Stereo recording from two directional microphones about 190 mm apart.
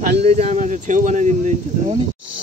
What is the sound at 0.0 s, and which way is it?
Speech, 35° right (ahead or behind).